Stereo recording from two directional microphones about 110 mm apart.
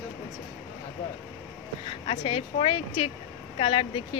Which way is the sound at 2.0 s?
55° left (ahead or behind).